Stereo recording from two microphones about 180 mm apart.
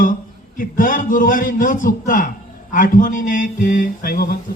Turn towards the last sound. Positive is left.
turn(degrees=55)  # may be behind; listen again after turning